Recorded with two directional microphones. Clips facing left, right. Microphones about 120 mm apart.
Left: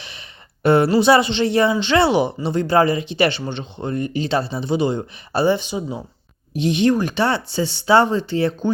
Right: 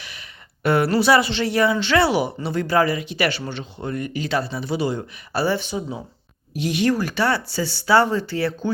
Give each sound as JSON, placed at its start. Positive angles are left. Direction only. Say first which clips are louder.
{"t": 0.0, "sound": "speech", "louder": "left 1 dB", "side_deg": 25}